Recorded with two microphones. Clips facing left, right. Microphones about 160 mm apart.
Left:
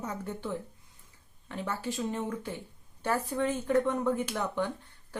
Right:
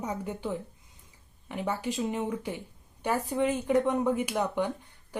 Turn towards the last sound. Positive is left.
turn(degrees=-15)  # may be behind; listen again after turning